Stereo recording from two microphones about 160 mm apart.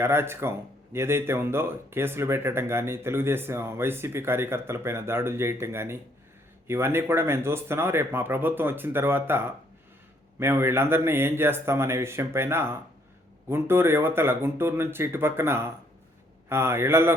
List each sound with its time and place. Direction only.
0.0 s speech: 15° right (ahead or behind)